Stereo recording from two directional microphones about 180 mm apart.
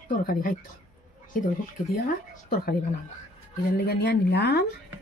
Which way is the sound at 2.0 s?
55° left (ahead or behind).